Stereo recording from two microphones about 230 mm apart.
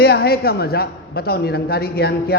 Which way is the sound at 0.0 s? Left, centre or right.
Left.